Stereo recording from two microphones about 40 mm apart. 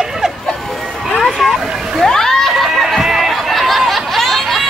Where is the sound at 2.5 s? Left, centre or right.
Centre.